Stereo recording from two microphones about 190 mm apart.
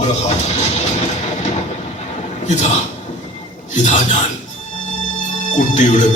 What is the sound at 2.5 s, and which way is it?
Music, 40° left (ahead or behind).